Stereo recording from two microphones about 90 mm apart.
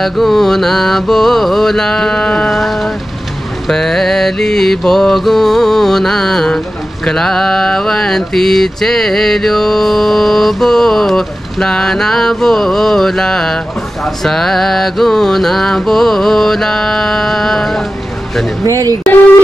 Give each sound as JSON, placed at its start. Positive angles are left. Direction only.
{"t": 0.0, "sound": "mantra", "side_deg": 0}
{"t": 18.7, "sound": "speech", "side_deg": -45}